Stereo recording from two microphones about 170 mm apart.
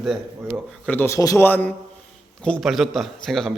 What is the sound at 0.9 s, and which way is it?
A man's voice, 15° left (ahead or behind).